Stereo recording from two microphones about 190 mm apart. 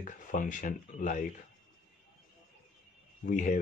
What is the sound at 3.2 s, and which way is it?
Speech, 45° left (ahead or behind).